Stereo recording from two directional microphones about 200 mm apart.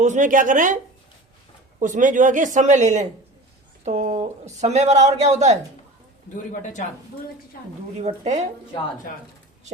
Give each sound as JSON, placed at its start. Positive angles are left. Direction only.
{"t": 0.0, "sound": "speech", "side_deg": -40}
{"t": 1.8, "sound": "speech", "side_deg": -40}
{"t": 6.3, "sound": "a man's voice", "side_deg": 40}
{"t": 7.9, "sound": "speech", "side_deg": -35}